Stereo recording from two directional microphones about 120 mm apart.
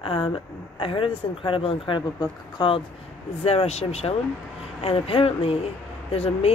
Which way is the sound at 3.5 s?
60° left (ahead or behind).